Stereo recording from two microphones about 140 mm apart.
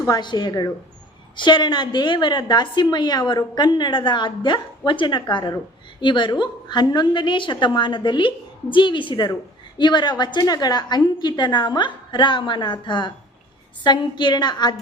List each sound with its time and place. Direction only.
0.1 s a woman's voice: 30° left (ahead or behind)